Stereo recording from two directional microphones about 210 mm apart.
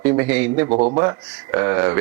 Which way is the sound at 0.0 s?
10° right (ahead or behind).